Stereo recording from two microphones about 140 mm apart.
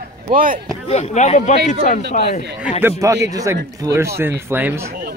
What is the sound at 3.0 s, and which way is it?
Speech, 20° right (ahead or behind).